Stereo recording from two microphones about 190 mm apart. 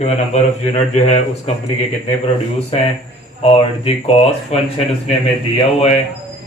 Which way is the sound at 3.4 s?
30° left (ahead or behind).